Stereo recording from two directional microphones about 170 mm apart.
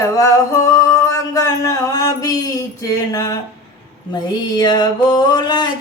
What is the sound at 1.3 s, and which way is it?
Speech, 20° left (ahead or behind).